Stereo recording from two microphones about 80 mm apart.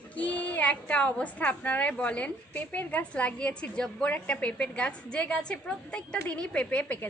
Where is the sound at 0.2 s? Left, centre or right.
Centre.